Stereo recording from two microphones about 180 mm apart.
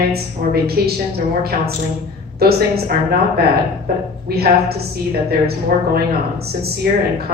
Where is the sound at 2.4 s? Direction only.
60° right (ahead or behind).